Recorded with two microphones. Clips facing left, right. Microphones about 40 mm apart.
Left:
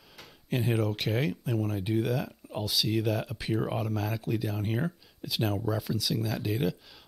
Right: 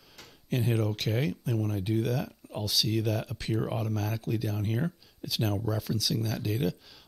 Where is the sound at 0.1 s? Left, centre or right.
Centre.